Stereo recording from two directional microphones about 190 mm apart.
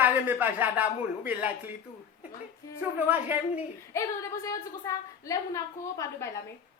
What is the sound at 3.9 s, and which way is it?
A woman's voice, 15° left (ahead or behind).